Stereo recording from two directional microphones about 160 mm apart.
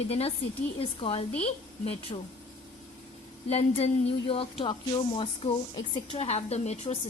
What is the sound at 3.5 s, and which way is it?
A woman's voice, 40° left (ahead or behind).